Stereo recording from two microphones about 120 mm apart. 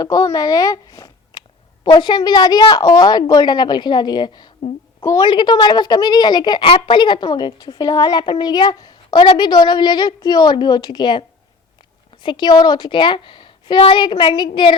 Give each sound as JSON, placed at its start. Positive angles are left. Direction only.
{"t": 0.0, "sound": "a woman's voice", "side_deg": 30}
{"t": 12.2, "sound": "speech", "side_deg": 40}